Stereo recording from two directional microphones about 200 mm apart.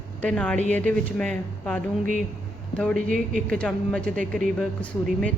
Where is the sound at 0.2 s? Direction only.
5° left (ahead or behind).